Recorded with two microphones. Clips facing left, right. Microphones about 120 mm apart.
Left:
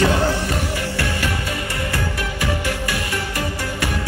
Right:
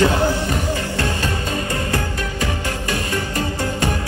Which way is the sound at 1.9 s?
25° right (ahead or behind).